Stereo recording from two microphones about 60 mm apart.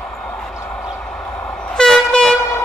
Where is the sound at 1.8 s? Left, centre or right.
Centre.